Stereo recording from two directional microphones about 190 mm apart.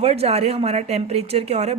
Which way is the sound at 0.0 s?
30° right (ahead or behind).